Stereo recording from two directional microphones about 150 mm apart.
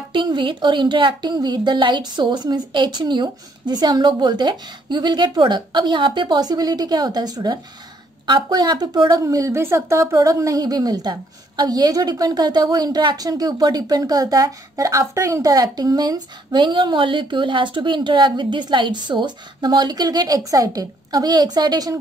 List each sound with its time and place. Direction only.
0.1 s a woman's voice: 30° right (ahead or behind)